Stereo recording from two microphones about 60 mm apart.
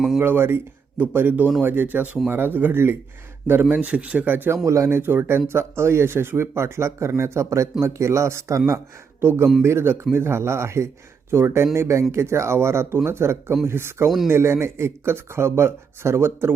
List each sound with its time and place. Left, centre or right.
0.2 s speech: right
4.5 s speech: right
4.9 s speech: right
9.2 s speech: right